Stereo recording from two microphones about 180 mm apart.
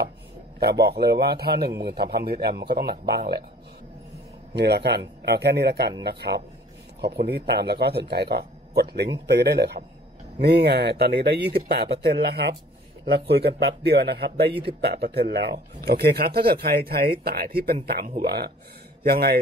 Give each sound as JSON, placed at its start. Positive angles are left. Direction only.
{"t": 0.6, "sound": "speech", "side_deg": -65}
{"t": 4.6, "sound": "speech", "side_deg": -65}